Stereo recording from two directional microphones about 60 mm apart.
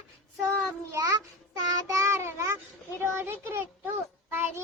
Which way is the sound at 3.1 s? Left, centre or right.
Right.